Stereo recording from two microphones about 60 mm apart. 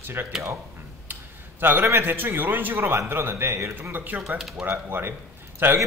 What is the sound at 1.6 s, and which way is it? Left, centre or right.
A man's voice, right.